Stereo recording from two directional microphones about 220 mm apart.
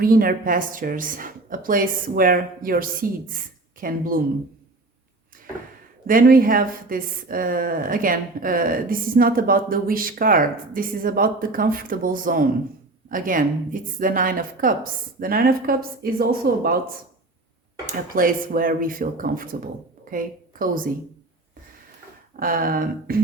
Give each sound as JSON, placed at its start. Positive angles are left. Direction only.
{"t": 0.0, "sound": "speech", "side_deg": -40}
{"t": 6.1, "sound": "speech", "side_deg": -40}
{"t": 18.1, "sound": "a woman's voice", "side_deg": -40}
{"t": 22.4, "sound": "speech", "side_deg": -40}